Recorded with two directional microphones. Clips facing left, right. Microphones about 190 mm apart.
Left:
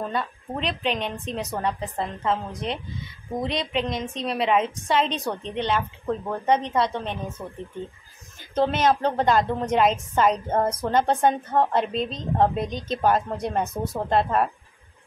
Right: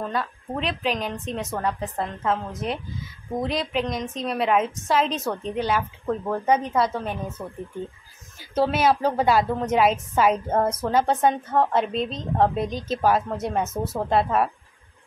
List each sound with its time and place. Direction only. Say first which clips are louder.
0.0 s a woman's voice: even; centre (ahead or behind)
13.7 s speech: right 1 dB; 10° left (ahead or behind)
14.0 s a woman's voice: even; 5° right (ahead or behind)